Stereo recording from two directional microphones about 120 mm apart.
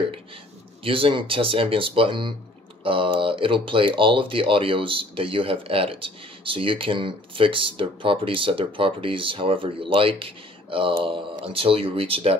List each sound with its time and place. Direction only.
0.8 s speech: 50° right (ahead or behind)